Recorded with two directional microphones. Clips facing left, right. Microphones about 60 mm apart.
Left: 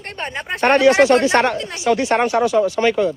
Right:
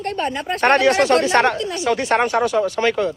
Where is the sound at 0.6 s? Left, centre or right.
Centre.